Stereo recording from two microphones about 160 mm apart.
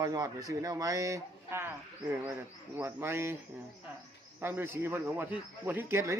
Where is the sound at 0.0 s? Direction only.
20° right (ahead or behind).